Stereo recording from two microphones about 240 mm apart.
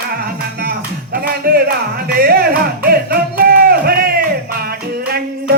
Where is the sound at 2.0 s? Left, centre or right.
Right.